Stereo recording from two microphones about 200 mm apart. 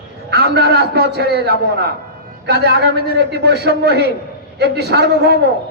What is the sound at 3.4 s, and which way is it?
A man's voice, 55° right (ahead or behind).